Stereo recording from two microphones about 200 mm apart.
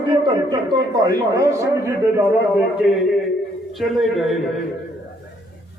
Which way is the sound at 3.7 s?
Centre (ahead or behind).